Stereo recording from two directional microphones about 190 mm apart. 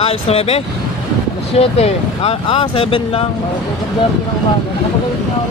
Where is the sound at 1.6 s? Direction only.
30° left (ahead or behind).